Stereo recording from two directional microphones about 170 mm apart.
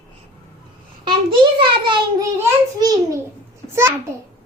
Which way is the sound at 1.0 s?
30° right (ahead or behind).